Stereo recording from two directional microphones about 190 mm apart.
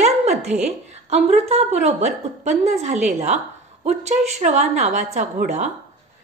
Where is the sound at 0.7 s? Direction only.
35° right (ahead or behind).